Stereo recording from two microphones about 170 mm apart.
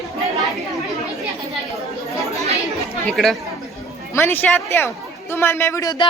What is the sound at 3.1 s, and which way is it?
Speech, centre (ahead or behind).